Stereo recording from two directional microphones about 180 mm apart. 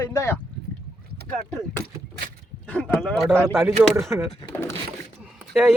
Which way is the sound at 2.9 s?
Centre (ahead or behind).